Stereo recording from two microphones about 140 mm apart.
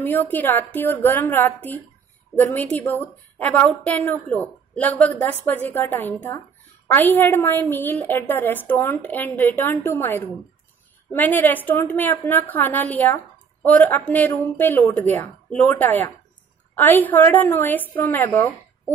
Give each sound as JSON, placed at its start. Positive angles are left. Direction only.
{"t": 0.0, "sound": "a woman's voice", "side_deg": 15}